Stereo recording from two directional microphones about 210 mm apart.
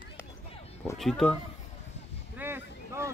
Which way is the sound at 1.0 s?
Centre (ahead or behind).